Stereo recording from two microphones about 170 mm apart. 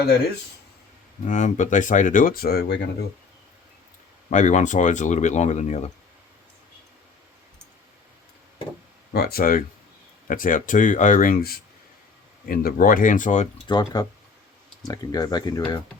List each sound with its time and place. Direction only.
1.3 s speech: 45° left (ahead or behind); by 2.8 s 75° left (ahead or behind)
4.3 s speech: 45° left (ahead or behind)
9.1 s speech: 65° left (ahead or behind); by 13.5 s 45° left (ahead or behind)
13.7 s speech: 25° left (ahead or behind)